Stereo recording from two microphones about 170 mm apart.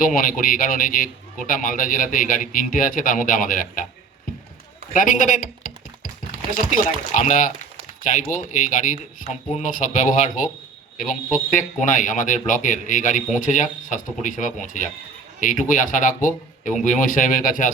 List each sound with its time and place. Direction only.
0.0 s a man's voice: 55° left (ahead or behind)
4.9 s speech: 50° left (ahead or behind)
11.5 s speech: 50° left (ahead or behind)